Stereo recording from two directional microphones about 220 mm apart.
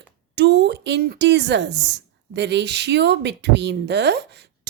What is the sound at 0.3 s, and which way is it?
A woman's voice, 50° right (ahead or behind).